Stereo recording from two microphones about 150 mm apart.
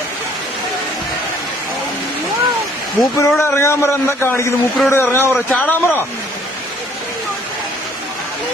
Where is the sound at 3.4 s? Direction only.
15° left (ahead or behind).